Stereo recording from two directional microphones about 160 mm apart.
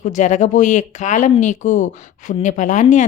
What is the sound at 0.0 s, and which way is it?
A woman's voice, 50° left (ahead or behind).